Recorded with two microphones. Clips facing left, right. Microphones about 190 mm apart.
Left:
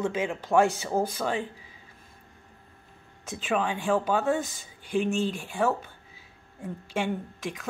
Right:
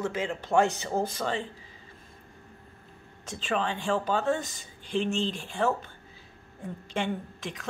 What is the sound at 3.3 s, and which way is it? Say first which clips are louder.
Speech: left 2 dB; 5° left (ahead or behind).